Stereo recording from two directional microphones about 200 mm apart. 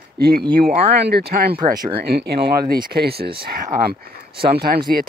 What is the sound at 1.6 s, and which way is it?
Speech, 20° right (ahead or behind).